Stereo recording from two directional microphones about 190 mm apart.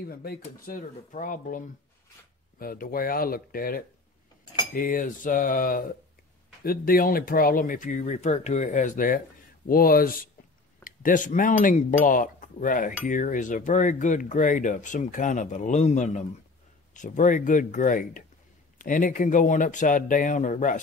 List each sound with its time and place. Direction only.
0.0 s speech: 50° left (ahead or behind)
2.6 s speech: 50° left (ahead or behind)
13.0 s cutlery: 45° left (ahead or behind)
16.9 s speech: 40° left (ahead or behind)